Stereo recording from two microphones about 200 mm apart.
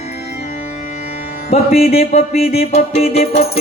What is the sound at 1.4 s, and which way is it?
Music, 30° left (ahead or behind).